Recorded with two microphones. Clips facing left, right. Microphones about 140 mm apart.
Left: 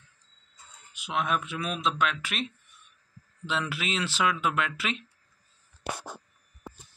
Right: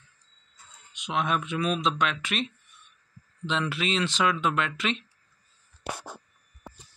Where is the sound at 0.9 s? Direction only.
5° left (ahead or behind).